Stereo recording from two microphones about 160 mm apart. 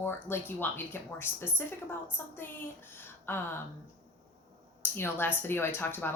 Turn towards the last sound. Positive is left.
turn(degrees=15)  # may be behind; listen again after turning